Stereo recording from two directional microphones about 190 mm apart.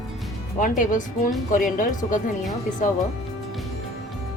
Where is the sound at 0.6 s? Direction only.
45° left (ahead or behind).